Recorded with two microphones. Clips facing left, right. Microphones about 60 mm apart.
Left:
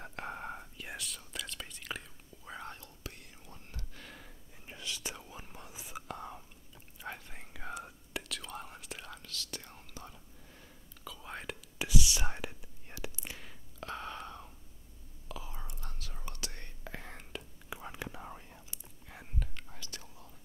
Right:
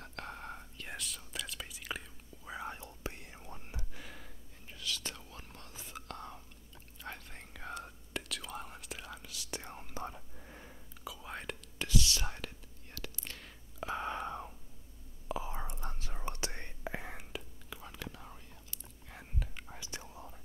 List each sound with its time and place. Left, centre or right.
0.0 s whispering: centre
2.8 s whispering: right
3.9 s gasp: centre
4.6 s whispering: left; by 9.6 s centre
9.6 s whispering: right
10.0 s whispering: right
11.1 s whispering: centre
11.8 s whispering: centre
13.7 s whispering: centre
17.6 s whispering: left
19.0 s whispering: centre
19.5 s whispering: centre